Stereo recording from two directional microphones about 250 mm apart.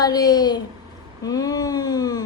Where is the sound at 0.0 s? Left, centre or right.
Centre.